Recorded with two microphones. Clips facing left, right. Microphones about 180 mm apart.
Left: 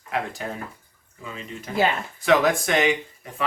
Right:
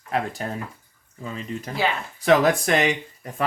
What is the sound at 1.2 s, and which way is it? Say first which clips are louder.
Speech: right 4 dB; 35° right (ahead or behind).